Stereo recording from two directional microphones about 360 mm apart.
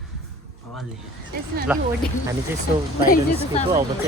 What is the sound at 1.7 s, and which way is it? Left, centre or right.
Speech, centre.